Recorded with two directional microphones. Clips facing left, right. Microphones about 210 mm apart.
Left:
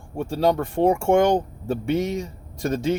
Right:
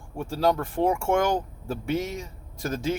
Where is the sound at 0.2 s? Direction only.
25° left (ahead or behind).